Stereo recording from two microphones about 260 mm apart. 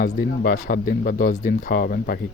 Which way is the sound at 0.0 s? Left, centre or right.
Left.